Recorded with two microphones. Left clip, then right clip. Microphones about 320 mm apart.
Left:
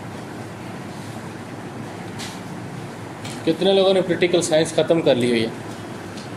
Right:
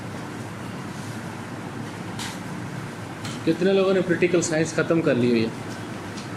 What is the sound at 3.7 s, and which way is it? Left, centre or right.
Speech, left.